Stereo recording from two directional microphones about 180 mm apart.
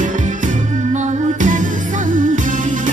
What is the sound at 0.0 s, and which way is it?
Music, 45° right (ahead or behind).